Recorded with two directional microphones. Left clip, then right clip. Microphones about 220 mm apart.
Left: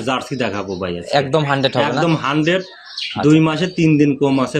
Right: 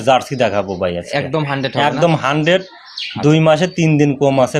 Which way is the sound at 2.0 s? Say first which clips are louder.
Right 3 dB; 45° right (ahead or behind).